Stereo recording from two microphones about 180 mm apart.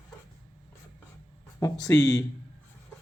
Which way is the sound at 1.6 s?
20° left (ahead or behind).